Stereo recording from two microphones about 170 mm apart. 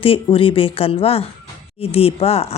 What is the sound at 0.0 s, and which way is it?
Speech, 30° left (ahead or behind).